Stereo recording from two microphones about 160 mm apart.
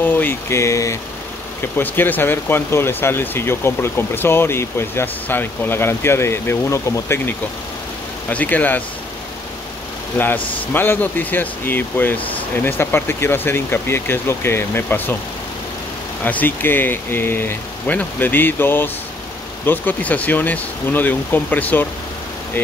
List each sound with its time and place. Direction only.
0.0 s speech: 10° left (ahead or behind)
10.1 s speech: 10° left (ahead or behind)
16.3 s speech: 10° left (ahead or behind)